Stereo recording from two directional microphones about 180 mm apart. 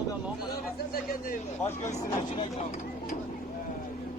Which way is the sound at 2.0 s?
30° left (ahead or behind).